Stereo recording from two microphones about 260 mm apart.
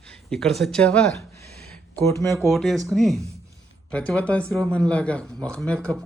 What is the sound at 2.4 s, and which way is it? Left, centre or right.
A woman's voice, centre.